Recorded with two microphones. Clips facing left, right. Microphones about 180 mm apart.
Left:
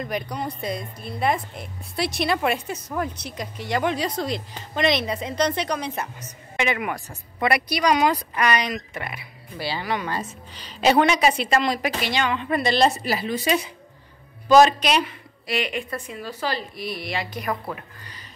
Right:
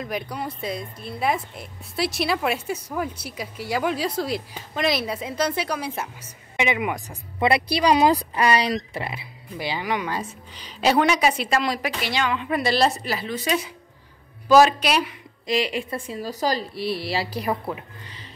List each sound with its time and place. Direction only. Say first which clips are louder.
0.0 s a woman's voice: left 1 dB; 5° right (ahead or behind)
13.0 s speech: left 3 dB; 10° left (ahead or behind)
14.5 s a woman's voice: left 1 dB; 5° right (ahead or behind)
15.4 s a woman's voice: right 3 dB; 30° right (ahead or behind)